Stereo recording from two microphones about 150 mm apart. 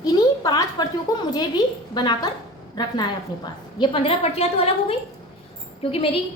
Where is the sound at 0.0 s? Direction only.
25° left (ahead or behind).